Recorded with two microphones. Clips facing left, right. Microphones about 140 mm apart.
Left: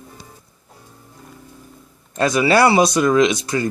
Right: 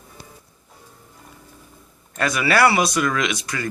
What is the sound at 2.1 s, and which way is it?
Speech, 25° left (ahead or behind).